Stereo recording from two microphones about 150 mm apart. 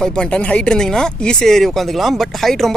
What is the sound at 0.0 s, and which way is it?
Speech, 5° left (ahead or behind).